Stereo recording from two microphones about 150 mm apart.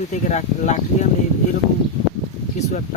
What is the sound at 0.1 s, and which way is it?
Speech, 50° left (ahead or behind).